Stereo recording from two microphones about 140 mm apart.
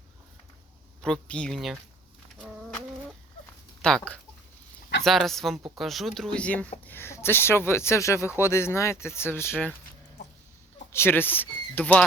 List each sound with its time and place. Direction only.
1.0 s speech: 5° left (ahead or behind)
3.8 s speech: 5° left (ahead or behind)
10.9 s speech: 15° left (ahead or behind)